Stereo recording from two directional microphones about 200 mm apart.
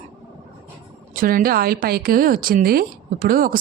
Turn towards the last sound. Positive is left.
turn(degrees=-45)  # may be behind; listen again after turning